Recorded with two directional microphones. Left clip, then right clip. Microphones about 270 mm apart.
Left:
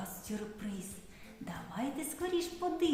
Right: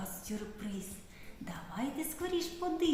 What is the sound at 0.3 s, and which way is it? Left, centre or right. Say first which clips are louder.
Speech: left 1 dB; centre.